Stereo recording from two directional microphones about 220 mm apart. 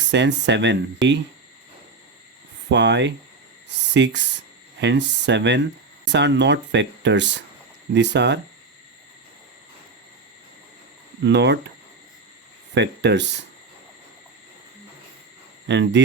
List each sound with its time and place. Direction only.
0.1 s speech: 55° right (ahead or behind)
2.6 s speech: 50° right (ahead or behind)
11.2 s speech: 50° right (ahead or behind)
12.7 s speech: 50° right (ahead or behind)
15.6 s speech: 50° right (ahead or behind)